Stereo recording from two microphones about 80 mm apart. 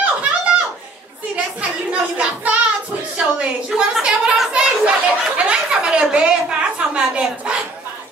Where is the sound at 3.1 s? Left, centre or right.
Centre.